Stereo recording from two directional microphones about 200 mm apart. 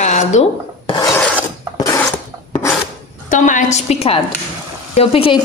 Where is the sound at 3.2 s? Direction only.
40° left (ahead or behind).